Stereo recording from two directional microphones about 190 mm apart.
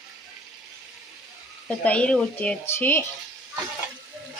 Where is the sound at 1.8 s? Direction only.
5° left (ahead or behind).